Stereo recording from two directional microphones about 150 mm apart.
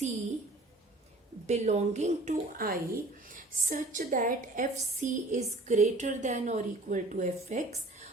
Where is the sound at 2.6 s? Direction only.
70° right (ahead or behind).